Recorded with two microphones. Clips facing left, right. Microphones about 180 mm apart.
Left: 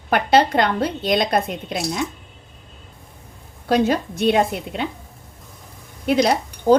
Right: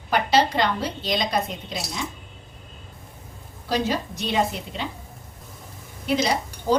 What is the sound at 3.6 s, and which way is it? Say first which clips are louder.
Speech: left 6 dB; 55° left (ahead or behind).